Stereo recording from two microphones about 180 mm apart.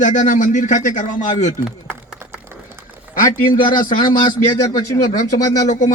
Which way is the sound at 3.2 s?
50° left (ahead or behind).